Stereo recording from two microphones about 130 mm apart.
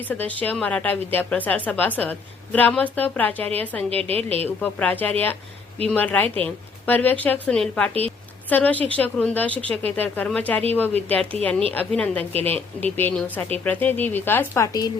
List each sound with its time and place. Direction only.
0.1 s a woman's voice: 10° left (ahead or behind)
3.8 s a woman's voice: 50° right (ahead or behind)
4.4 s a woman's voice: 15° left (ahead or behind); by 14.9 s 30° left (ahead or behind)